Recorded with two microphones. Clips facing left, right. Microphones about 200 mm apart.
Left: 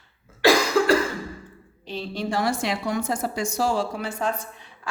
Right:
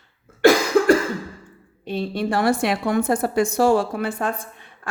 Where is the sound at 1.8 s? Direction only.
55° right (ahead or behind).